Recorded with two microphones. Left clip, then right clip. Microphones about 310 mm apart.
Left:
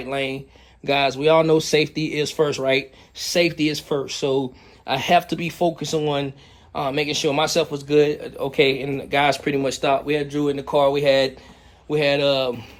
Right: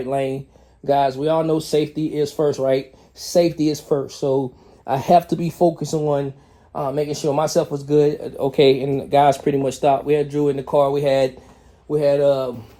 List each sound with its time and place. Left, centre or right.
0.1 s speech: centre
1.2 s speech: centre
2.2 s speech: centre